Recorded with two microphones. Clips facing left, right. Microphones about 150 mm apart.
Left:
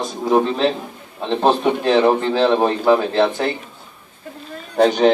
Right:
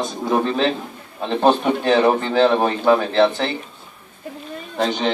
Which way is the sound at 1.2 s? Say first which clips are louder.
Even; centre (ahead or behind).